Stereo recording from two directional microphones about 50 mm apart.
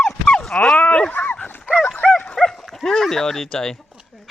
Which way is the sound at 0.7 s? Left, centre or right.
Left.